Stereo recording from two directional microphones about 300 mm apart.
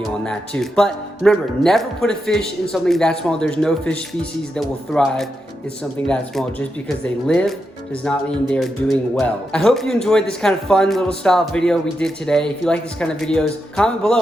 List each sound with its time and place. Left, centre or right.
0.0 s speech: centre